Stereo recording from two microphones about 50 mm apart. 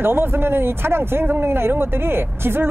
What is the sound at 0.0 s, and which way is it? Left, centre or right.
Speech, right.